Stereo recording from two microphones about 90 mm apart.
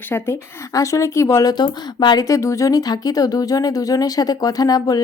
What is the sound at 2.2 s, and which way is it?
Speech, 35° left (ahead or behind).